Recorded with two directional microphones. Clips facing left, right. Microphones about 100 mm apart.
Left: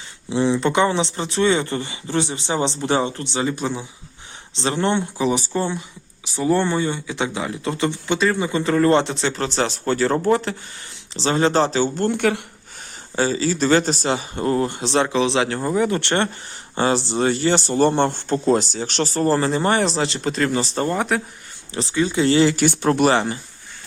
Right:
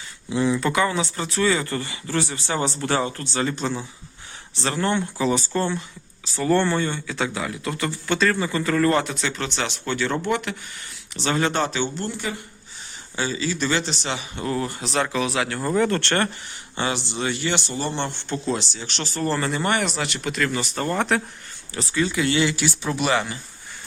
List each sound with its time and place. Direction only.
0.3 s speech: 25° left (ahead or behind); by 12.4 s 65° left (ahead or behind)
13.1 s speech: 40° left (ahead or behind)
15.6 s speech: 10° left (ahead or behind)
16.7 s speech: 40° left (ahead or behind)
20.9 s speech: 10° left (ahead or behind)
21.8 s speech: 20° left (ahead or behind); by 23.0 s 60° left (ahead or behind)
23.0 s speech: 35° left (ahead or behind)